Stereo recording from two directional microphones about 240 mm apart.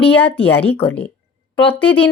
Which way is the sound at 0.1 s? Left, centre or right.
Centre.